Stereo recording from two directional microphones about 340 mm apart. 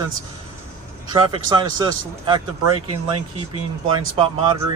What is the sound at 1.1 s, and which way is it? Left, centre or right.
Speech, centre.